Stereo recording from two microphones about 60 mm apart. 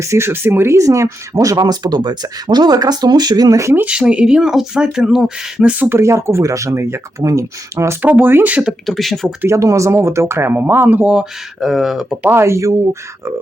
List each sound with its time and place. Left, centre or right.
0.0 s speech: right
0.8 s speech: right
1.3 s speech: right
1.8 s speech: right
3.3 s speech: right
3.8 s speech: centre
5.9 s speech: right
7.2 s speech: right
8.0 s speech: right
8.9 s speech: centre
9.5 s speech: right
10.5 s speech: right
11.0 s speech: centre
12.3 s speech: right